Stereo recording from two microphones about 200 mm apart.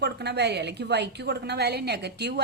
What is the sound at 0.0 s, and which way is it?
A woman's voice, 55° right (ahead or behind).